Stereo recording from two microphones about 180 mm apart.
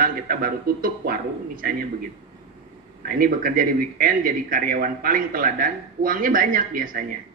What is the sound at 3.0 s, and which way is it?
A man's voice, 55° right (ahead or behind).